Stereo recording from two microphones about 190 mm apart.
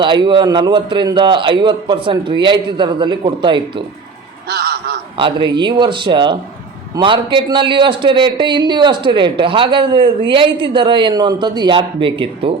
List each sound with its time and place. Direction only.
0.0 s a man's voice: 25° right (ahead or behind)
4.4 s a sound: 60° right (ahead or behind)
5.1 s a man's voice: 25° right (ahead or behind)